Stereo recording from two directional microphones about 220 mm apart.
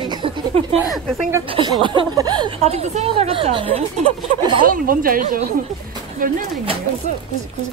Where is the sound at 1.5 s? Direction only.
20° right (ahead or behind).